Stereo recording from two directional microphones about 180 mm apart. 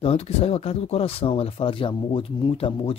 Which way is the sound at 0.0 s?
35° left (ahead or behind).